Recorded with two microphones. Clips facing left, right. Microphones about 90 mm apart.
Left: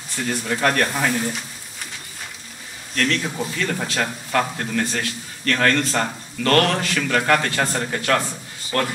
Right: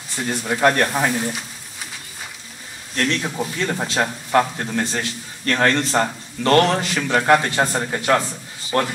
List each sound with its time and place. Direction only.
0.2 s a man's voice: 20° right (ahead or behind)
1.1 s speech: 10° right (ahead or behind)
3.0 s a man's voice: 25° right (ahead or behind)